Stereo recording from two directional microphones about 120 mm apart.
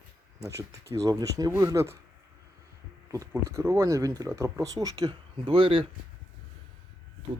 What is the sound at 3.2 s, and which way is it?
Speech, 25° right (ahead or behind).